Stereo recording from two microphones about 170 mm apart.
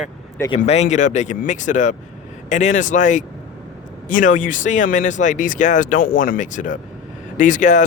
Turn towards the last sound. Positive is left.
turn(degrees=45)  # may be behind; listen again after turning